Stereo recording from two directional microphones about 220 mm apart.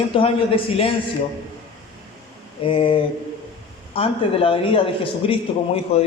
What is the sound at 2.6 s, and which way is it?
A man's voice, 25° left (ahead or behind).